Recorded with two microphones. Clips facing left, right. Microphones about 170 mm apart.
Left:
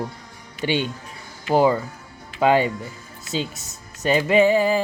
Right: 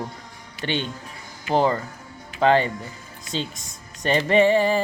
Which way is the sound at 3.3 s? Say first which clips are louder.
Left 2 dB; 5° left (ahead or behind).